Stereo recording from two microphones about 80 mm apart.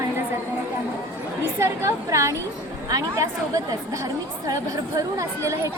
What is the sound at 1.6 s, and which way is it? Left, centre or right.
Speech, right.